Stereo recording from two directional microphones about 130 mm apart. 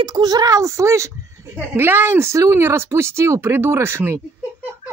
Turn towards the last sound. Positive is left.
turn(degrees=-20)  # may be behind; listen again after turning